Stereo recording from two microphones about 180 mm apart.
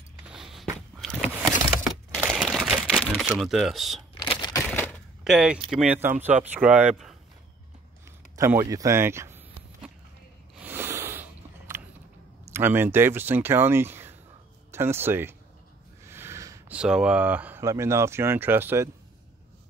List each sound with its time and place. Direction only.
0.3 s walk: centre (ahead or behind)
0.7 s biting: centre (ahead or behind)
1.9 s typewriter: 5° right (ahead or behind)
3.1 s speech: centre (ahead or behind)
4.1 s a sound: 25° left (ahead or behind)
5.2 s speech: centre (ahead or behind)
8.4 s speech: 15° right (ahead or behind)
10.6 s a sound: 10° right (ahead or behind)
12.4 s speech: 15° right (ahead or behind)